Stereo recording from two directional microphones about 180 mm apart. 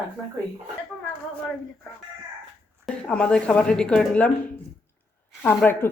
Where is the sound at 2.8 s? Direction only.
5° left (ahead or behind).